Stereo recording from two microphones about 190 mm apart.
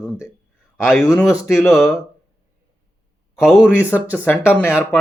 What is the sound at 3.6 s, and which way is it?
Speech, 10° left (ahead or behind).